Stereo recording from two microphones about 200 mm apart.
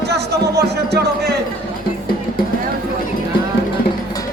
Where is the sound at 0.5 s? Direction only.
55° right (ahead or behind).